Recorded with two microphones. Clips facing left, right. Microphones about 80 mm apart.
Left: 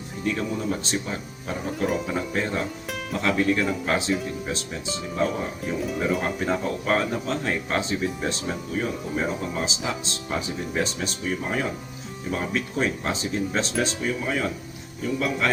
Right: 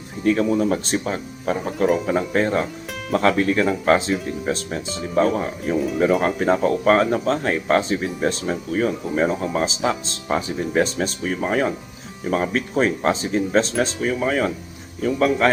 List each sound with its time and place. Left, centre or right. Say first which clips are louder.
0.3 s speech: right 8 dB; right